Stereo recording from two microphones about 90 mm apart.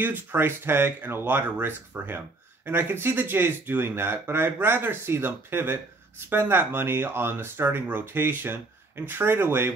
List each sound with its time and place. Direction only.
0.0 s speech: 20° right (ahead or behind)